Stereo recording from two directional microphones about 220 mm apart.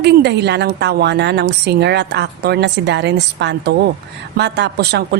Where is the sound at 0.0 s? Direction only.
50° right (ahead or behind).